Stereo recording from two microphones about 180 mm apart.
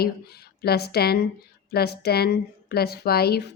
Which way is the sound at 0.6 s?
60° left (ahead or behind).